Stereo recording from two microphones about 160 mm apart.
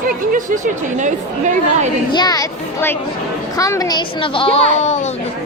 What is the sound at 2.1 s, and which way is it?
A woman's voice, 25° left (ahead or behind).